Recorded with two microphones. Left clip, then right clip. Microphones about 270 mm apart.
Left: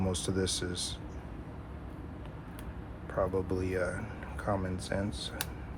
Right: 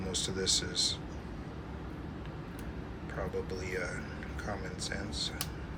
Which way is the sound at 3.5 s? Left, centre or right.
Centre.